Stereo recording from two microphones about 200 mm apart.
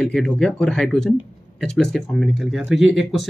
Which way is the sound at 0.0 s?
5° left (ahead or behind).